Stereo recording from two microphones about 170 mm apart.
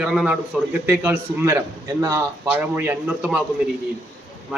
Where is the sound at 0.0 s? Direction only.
5° right (ahead or behind).